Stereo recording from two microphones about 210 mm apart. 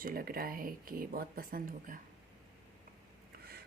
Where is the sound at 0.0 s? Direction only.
45° right (ahead or behind).